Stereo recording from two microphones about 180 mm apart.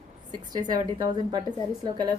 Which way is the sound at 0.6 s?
20° right (ahead or behind).